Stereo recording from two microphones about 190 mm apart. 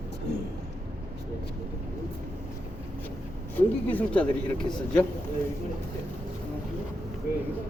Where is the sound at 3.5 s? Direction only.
10° left (ahead or behind).